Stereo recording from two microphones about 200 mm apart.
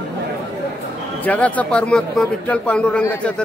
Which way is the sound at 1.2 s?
10° left (ahead or behind).